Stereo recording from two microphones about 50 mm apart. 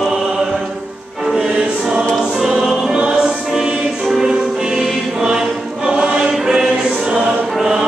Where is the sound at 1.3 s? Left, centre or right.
Centre.